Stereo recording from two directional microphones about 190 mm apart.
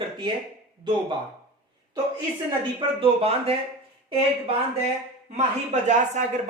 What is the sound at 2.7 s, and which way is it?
Speech, 30° right (ahead or behind).